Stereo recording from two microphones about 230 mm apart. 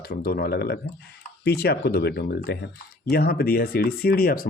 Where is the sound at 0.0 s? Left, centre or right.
Left.